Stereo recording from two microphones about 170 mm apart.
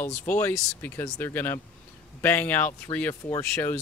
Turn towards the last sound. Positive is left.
turn(degrees=10)  # may be behind; listen again after turning